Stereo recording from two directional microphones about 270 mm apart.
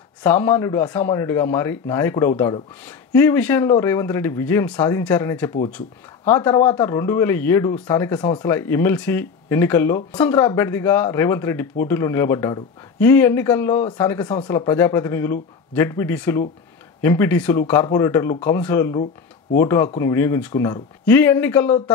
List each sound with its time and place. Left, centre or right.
0.2 s speech: centre